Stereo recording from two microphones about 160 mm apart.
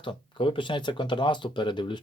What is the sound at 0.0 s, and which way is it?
Speech, 30° left (ahead or behind).